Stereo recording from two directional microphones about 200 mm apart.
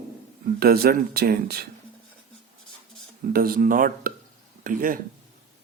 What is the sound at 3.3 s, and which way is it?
Speech, 45° right (ahead or behind).